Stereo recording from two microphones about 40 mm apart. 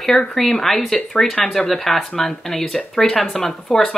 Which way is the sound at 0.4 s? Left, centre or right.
Centre.